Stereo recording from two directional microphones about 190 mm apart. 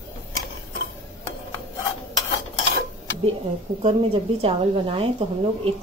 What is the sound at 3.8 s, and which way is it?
A woman's voice, 30° right (ahead or behind).